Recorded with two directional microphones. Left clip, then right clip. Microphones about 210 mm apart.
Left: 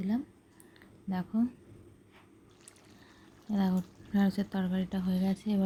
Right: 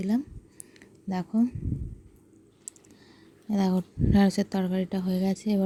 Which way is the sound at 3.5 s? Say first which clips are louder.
Right 5 dB; 35° right (ahead or behind).